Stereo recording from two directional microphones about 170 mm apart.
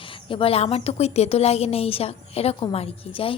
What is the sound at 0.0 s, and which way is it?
A woman's voice, 30° left (ahead or behind).